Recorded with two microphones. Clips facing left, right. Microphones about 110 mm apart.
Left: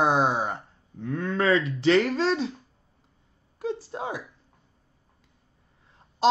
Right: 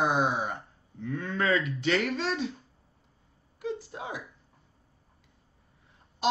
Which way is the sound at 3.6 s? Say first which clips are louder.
Left 4 dB; 35° left (ahead or behind).